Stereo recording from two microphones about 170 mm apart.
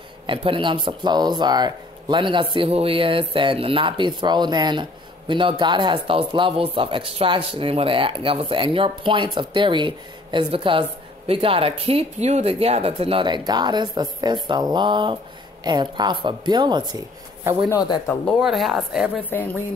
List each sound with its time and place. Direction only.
0.3 s speech: 30° right (ahead or behind)
17.6 s speech: 25° left (ahead or behind)
18.4 s speech: centre (ahead or behind)